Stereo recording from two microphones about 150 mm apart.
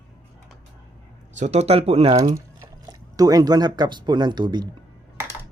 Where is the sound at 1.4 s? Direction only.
45° right (ahead or behind).